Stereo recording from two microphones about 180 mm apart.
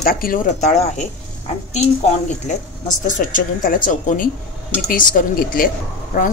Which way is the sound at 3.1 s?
45° left (ahead or behind).